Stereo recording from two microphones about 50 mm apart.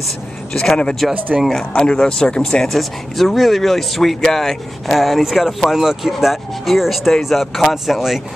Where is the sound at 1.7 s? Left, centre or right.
Centre.